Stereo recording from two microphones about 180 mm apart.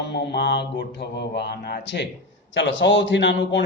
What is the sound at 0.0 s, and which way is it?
A man's voice, 70° left (ahead or behind).